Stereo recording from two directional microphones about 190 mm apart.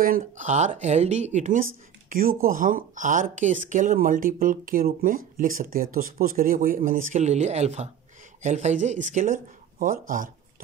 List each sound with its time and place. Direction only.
0.0 s speech: 45° right (ahead or behind)